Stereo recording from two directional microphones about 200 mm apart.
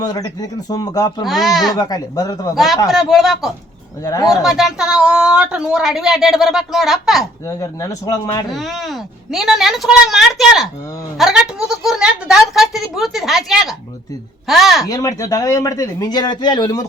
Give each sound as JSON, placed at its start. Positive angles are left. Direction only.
{"t": 0.0, "sound": "speech", "side_deg": 20}
{"t": 1.3, "sound": "speech", "side_deg": 0}
{"t": 1.7, "sound": "speech", "side_deg": 20}
{"t": 2.9, "sound": "speech", "side_deg": 0}
{"t": 4.0, "sound": "speech", "side_deg": 20}
{"t": 4.4, "sound": "speech", "side_deg": 0}
{"t": 7.4, "sound": "speech", "side_deg": 15}
{"t": 8.4, "sound": "speech", "side_deg": 0}
{"t": 14.8, "sound": "speech", "side_deg": 15}